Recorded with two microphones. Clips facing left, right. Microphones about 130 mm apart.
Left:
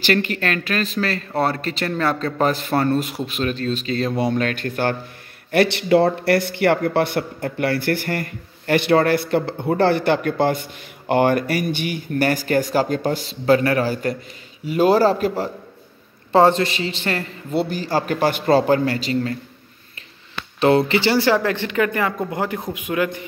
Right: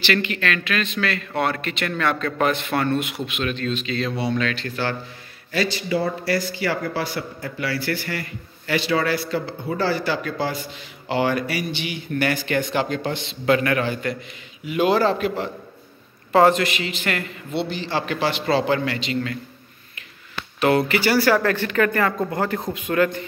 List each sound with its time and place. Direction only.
0.0 s a man's voice: 45° left (ahead or behind)
5.5 s a man's voice: 65° left (ahead or behind); by 19.3 s 40° left (ahead or behind)
20.6 s a man's voice: 25° left (ahead or behind)